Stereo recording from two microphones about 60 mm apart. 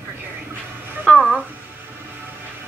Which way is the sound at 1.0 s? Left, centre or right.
Right.